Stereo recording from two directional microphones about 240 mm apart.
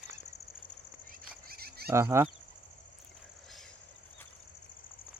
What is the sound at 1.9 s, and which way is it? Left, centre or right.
Speech, centre.